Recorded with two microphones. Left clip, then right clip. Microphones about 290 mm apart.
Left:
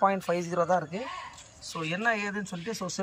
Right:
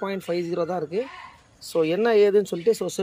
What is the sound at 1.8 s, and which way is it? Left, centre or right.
Speech, centre.